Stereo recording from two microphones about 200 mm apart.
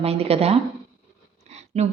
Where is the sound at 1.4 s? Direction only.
35° right (ahead or behind).